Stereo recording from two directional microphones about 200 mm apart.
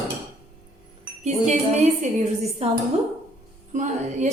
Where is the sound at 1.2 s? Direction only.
35° right (ahead or behind).